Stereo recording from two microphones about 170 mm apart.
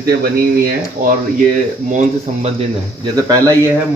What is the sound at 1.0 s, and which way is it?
Speech, 50° right (ahead or behind).